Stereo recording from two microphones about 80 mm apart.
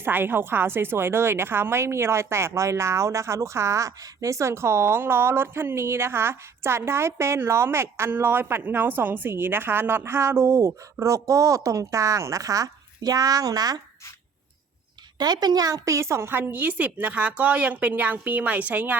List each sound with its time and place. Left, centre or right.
0.0 s a woman's voice: right
15.2 s a woman's voice: right